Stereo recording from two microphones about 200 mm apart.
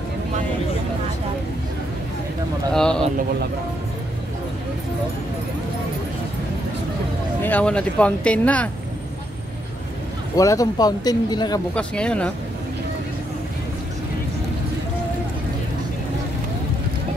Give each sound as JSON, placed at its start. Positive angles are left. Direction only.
{"t": 2.7, "sound": "speech", "side_deg": 5}
{"t": 7.4, "sound": "speech", "side_deg": 5}
{"t": 10.3, "sound": "speech", "side_deg": 15}
{"t": 11.7, "sound": "speech", "side_deg": 5}